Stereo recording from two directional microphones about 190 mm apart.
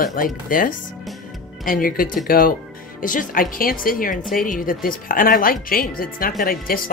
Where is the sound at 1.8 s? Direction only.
45° left (ahead or behind).